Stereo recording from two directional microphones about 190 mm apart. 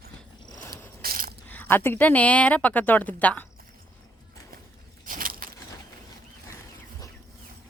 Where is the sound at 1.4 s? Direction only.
10° left (ahead or behind).